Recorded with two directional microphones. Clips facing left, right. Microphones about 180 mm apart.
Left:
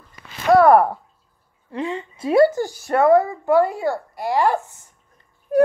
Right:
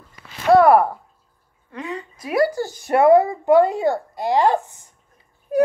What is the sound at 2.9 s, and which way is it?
Speech, 15° right (ahead or behind).